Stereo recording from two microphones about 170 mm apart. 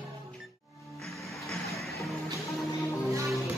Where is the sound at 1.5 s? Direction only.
Centre (ahead or behind).